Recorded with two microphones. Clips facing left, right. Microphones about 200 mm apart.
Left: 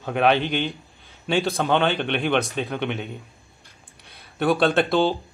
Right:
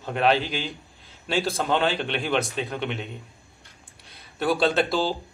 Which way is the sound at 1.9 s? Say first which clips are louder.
Left 3 dB; 60° left (ahead or behind).